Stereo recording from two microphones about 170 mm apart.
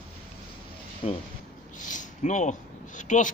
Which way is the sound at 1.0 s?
35° left (ahead or behind).